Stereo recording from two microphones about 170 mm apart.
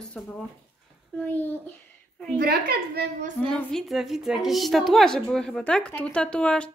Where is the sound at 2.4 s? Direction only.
65° right (ahead or behind).